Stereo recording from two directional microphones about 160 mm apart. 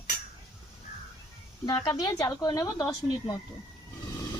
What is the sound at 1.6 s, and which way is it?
A woman's voice, 30° left (ahead or behind).